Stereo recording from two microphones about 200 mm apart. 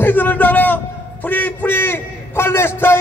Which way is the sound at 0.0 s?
10° left (ahead or behind).